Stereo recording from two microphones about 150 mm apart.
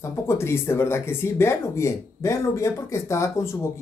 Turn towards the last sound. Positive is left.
turn(degrees=20)  # may be behind; listen again after turning